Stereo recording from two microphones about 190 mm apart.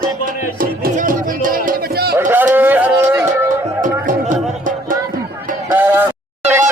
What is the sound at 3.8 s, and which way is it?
Chatter, 45° right (ahead or behind).